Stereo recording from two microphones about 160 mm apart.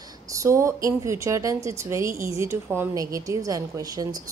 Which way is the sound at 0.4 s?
20° right (ahead or behind).